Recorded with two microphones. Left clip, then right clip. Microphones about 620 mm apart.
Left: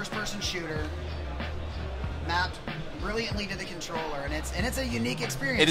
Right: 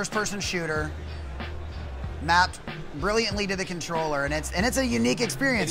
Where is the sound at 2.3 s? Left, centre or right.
Right.